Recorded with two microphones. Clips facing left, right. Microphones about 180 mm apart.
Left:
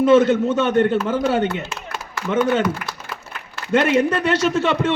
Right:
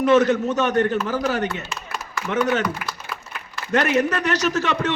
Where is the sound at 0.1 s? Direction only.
25° left (ahead or behind).